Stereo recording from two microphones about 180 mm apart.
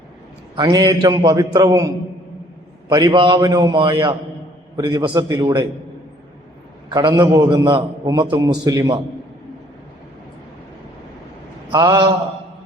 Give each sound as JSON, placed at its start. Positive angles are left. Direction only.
{"t": 0.5, "sound": "a man's voice", "side_deg": -25}
{"t": 2.9, "sound": "a man's voice", "side_deg": -25}
{"t": 6.9, "sound": "a man's voice", "side_deg": -20}
{"t": 11.7, "sound": "a man's voice", "side_deg": -20}